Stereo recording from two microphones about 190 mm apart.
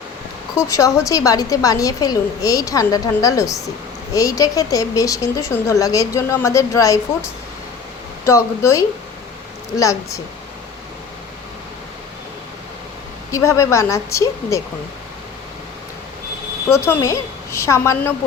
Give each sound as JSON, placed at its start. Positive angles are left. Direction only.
{"t": 0.5, "sound": "speech", "side_deg": 15}
{"t": 13.3, "sound": "speech", "side_deg": 15}
{"t": 16.8, "sound": "speech", "side_deg": 15}